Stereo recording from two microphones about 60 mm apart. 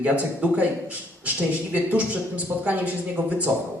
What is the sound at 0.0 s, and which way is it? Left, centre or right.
A man's voice, right.